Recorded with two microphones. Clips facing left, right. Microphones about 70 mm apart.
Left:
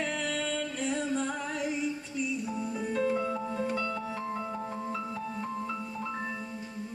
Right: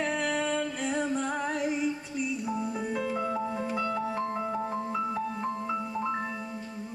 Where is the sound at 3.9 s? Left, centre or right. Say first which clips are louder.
Right 4 dB; right.